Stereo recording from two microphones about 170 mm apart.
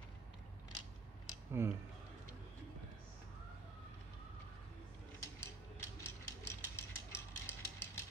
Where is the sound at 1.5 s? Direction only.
15° right (ahead or behind).